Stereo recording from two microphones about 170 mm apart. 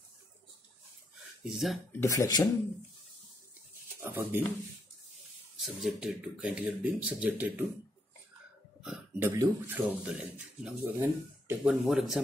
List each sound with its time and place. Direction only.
1.4 s speech: centre (ahead or behind)
1.9 s speech: 15° left (ahead or behind)
4.0 s speech: 15° right (ahead or behind)
5.6 s speech: centre (ahead or behind)
8.8 s speech: 5° right (ahead or behind)
9.3 s speech: 15° right (ahead or behind)
11.8 s speech: centre (ahead or behind)